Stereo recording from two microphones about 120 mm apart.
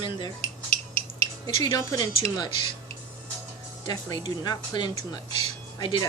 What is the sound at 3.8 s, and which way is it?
Speech, 35° left (ahead or behind).